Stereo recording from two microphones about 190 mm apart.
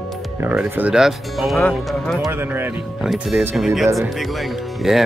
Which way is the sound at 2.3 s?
10° right (ahead or behind).